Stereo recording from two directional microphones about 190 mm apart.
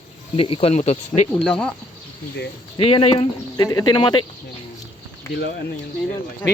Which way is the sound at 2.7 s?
30° left (ahead or behind).